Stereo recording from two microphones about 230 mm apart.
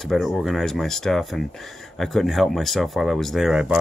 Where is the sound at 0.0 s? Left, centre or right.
Centre.